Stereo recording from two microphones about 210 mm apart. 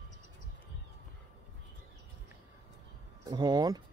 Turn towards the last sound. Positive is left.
turn(degrees=-20)  # may be behind; listen again after turning